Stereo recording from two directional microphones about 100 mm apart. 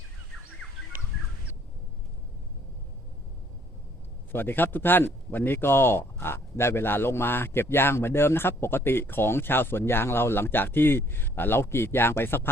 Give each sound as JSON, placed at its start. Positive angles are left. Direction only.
{"t": 4.3, "sound": "a man's voice", "side_deg": 20}